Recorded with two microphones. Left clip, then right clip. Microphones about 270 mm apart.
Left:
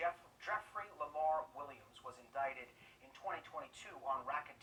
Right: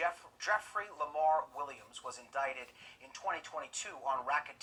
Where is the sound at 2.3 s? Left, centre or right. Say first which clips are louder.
Right 4 dB; right.